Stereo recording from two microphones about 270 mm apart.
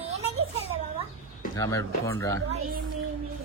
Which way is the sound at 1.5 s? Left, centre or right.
Centre.